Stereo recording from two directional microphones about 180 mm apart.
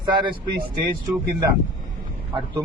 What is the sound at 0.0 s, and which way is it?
Speech, 25° right (ahead or behind).